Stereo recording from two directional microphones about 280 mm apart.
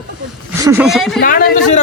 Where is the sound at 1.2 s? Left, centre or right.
Left.